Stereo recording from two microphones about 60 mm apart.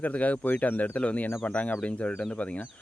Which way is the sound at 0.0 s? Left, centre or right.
Left.